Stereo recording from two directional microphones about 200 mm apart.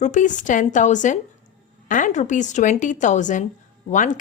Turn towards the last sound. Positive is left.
turn(degrees=40)  # may be behind; listen again after turning